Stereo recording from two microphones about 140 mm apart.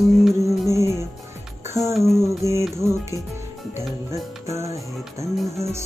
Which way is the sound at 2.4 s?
20° right (ahead or behind).